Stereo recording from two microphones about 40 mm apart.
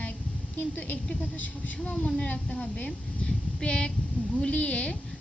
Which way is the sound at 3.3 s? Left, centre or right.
Left.